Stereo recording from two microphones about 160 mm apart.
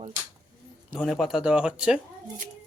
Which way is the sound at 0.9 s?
Centre (ahead or behind).